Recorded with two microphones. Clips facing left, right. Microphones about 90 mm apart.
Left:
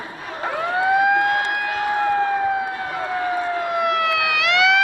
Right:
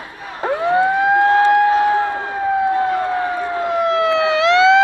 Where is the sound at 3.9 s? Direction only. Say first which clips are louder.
Right 5 dB; 25° right (ahead or behind).